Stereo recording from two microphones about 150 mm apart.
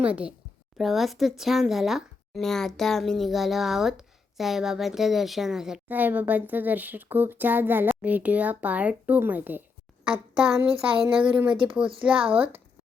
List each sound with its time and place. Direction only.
0.0 s a woman's voice: 10° right (ahead or behind)